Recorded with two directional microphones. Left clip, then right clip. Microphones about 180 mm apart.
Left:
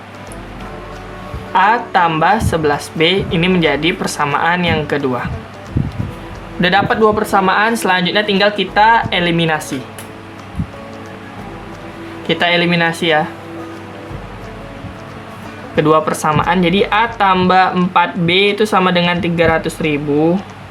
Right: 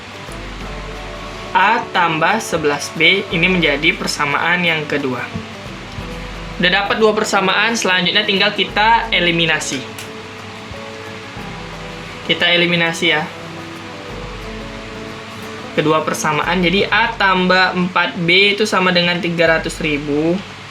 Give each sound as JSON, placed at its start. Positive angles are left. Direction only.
{"t": 1.5, "sound": "speech", "side_deg": 45}
{"t": 6.6, "sound": "speech", "side_deg": 45}
{"t": 12.3, "sound": "speech", "side_deg": 45}
{"t": 15.7, "sound": "speech", "side_deg": 45}